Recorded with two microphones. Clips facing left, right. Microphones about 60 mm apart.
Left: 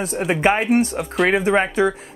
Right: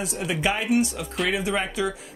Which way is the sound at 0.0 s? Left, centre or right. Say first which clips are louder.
Left 7 dB; left.